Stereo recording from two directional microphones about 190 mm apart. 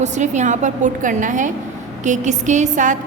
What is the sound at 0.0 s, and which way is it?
A woman's voice, 40° right (ahead or behind).